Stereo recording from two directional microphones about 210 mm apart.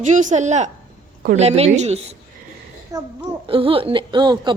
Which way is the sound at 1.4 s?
30° right (ahead or behind).